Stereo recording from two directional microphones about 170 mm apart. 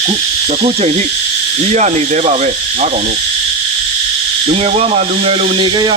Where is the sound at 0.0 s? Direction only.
30° right (ahead or behind).